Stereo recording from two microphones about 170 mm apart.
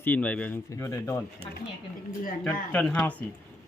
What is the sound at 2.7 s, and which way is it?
Speech, 5° left (ahead or behind).